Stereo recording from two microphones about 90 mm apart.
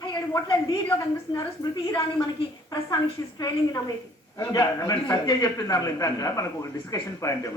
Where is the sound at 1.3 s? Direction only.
45° left (ahead or behind).